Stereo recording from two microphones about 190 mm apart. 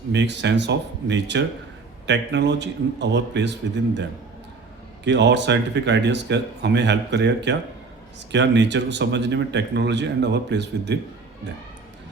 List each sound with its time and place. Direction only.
0.1 s speech: 65° right (ahead or behind)
5.0 s speech: 65° right (ahead or behind)